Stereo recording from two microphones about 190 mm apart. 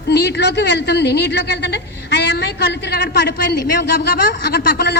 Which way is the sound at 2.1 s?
60° left (ahead or behind).